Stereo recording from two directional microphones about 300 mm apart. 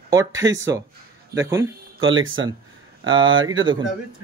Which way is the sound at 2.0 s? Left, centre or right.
Right.